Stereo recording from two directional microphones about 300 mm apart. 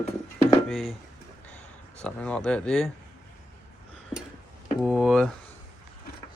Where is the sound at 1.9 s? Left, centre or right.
Centre.